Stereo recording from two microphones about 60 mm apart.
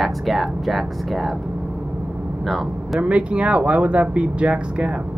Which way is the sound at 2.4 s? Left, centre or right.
Centre.